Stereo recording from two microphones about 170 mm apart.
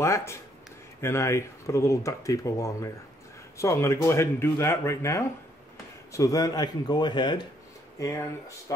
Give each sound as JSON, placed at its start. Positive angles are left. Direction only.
{"t": 0.0, "sound": "speech", "side_deg": 15}